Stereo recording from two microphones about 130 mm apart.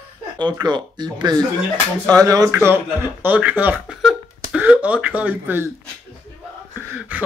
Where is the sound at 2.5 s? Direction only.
15° right (ahead or behind).